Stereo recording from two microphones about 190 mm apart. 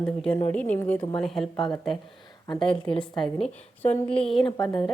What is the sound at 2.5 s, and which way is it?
Speech, 25° left (ahead or behind).